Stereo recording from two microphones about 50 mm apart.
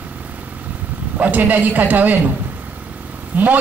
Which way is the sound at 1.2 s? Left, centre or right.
Right.